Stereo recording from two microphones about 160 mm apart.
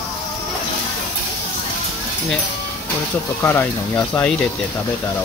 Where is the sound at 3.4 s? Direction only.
10° left (ahead or behind).